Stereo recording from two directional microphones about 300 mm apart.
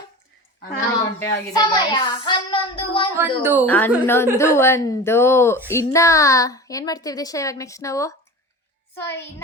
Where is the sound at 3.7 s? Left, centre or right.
Centre.